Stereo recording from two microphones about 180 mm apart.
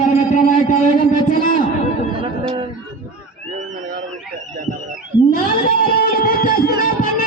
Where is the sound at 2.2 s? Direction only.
30° right (ahead or behind).